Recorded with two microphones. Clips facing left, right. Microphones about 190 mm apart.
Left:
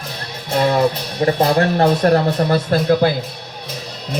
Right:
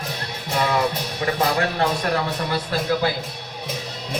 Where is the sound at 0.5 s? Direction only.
40° left (ahead or behind).